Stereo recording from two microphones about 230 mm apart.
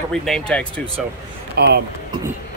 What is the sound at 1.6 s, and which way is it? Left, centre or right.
Speech, right.